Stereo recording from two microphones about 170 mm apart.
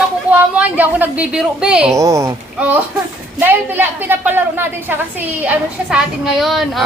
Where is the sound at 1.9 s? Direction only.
20° right (ahead or behind); by 6.8 s centre (ahead or behind).